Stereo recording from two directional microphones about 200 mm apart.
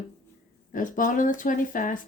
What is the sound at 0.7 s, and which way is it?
Speech, 40° left (ahead or behind).